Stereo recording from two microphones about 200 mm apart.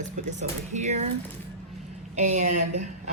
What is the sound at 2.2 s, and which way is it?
Speech, 35° right (ahead or behind).